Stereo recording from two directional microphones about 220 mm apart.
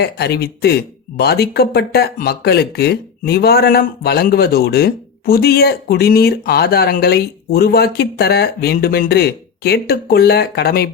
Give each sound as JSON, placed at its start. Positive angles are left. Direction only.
{"t": 0.0, "sound": "speech", "side_deg": 45}